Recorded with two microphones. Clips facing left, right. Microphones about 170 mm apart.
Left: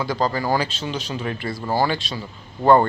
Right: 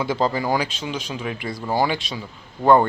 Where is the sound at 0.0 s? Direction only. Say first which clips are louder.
Right 1 dB; 20° right (ahead or behind).